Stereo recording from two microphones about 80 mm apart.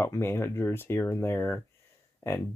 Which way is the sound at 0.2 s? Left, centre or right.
Left.